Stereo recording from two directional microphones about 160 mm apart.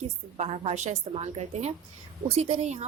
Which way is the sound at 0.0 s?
45° right (ahead or behind).